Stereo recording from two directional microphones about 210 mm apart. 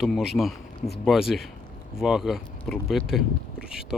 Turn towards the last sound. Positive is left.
turn(degrees=0)  # may be behind; listen again after turning